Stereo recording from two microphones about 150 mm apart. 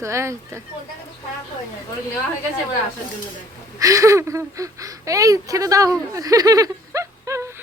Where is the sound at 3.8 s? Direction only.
20° right (ahead or behind).